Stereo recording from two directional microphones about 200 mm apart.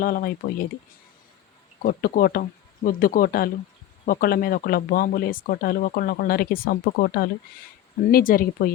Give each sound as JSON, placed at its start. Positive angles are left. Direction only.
{"t": 0.0, "sound": "speech", "side_deg": 45}
{"t": 1.8, "sound": "speech", "side_deg": 50}